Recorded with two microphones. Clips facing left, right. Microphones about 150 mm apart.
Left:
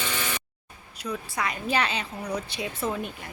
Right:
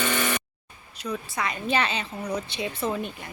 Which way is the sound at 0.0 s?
60° right (ahead or behind).